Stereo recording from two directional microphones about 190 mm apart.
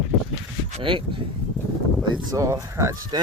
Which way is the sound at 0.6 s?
30° right (ahead or behind).